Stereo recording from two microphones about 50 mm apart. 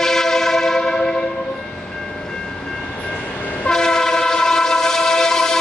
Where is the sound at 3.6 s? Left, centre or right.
Centre.